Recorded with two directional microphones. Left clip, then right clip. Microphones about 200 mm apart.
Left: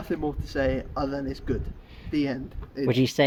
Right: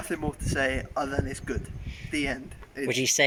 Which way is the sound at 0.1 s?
Centre (ahead or behind).